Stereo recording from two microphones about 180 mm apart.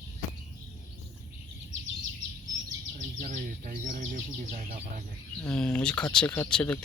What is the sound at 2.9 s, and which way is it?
Bird, 45° right (ahead or behind).